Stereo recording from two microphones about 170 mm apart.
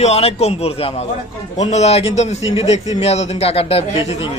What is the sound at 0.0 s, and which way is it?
A man's voice, 35° left (ahead or behind).